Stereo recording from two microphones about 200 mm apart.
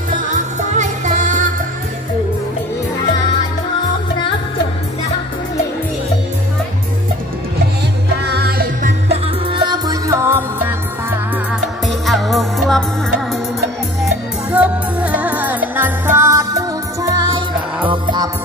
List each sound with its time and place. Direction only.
0.7 s music: 35° right (ahead or behind)
8.2 s music: 55° right (ahead or behind)
9.1 s music: 25° right (ahead or behind)
12.1 s music: centre (ahead or behind)
14.5 s music: 5° right (ahead or behind); by 18.3 s 20° right (ahead or behind)